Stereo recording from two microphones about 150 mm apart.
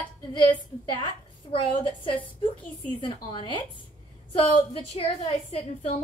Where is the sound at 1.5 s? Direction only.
35° left (ahead or behind).